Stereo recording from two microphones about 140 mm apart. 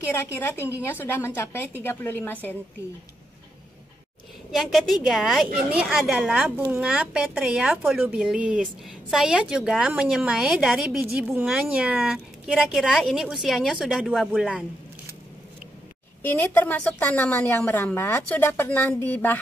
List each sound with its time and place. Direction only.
0.1 s a woman's voice: 15° left (ahead or behind)
4.5 s a woman's voice: centre (ahead or behind)
16.2 s a woman's voice: 15° left (ahead or behind)